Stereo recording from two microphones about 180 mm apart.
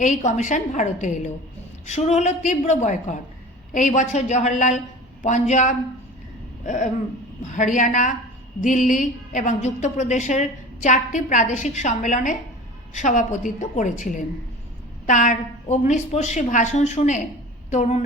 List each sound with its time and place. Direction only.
0.0 s a woman's voice: 40° left (ahead or behind)